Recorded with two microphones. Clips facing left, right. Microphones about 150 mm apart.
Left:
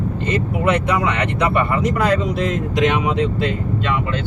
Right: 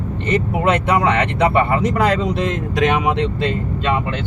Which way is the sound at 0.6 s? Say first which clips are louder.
Right 1 dB; 75° right (ahead or behind).